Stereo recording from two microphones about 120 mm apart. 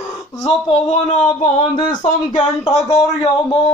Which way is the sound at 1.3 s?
90° left.